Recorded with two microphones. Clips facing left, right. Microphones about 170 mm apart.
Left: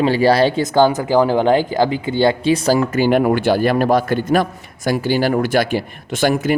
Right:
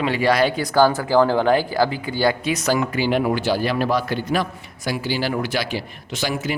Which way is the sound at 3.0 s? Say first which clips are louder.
Left 6 dB; 50° left (ahead or behind).